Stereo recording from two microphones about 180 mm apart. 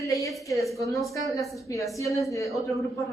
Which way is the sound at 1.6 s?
15° left (ahead or behind).